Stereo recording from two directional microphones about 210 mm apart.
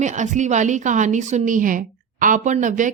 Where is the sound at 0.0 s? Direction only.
35° right (ahead or behind).